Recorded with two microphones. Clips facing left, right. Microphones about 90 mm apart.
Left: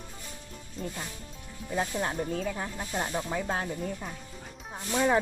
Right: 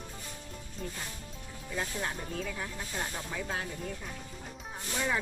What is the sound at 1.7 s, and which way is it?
Speech, 30° left (ahead or behind).